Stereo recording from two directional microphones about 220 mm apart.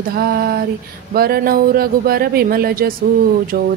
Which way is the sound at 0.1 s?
40° right (ahead or behind).